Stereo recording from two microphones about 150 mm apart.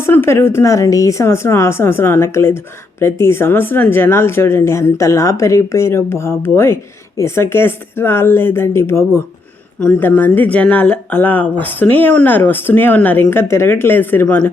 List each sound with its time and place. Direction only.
0.0 s speech: 15° left (ahead or behind)